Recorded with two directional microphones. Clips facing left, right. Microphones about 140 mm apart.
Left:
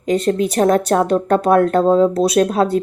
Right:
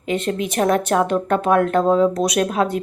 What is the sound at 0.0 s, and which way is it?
Speech, 35° left (ahead or behind).